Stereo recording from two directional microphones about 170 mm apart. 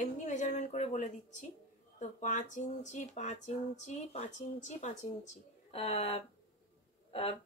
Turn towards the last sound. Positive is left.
turn(degrees=35)  # may be behind; listen again after turning